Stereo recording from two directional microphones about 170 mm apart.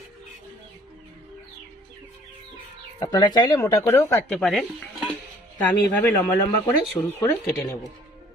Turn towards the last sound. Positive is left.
turn(degrees=20)  # may be behind; listen again after turning